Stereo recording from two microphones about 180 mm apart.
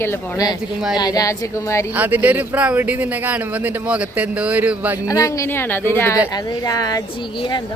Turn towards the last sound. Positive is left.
turn(degrees=20)  # may be behind; listen again after turning